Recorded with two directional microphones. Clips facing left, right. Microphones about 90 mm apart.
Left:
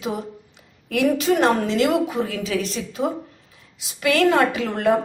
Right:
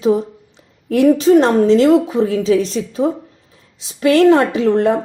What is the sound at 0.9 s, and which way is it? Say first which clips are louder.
A woman's voice: right 9 dB; 35° right (ahead or behind).